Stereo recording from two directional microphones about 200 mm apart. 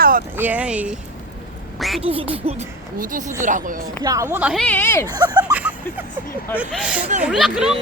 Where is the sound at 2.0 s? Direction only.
30° right (ahead or behind).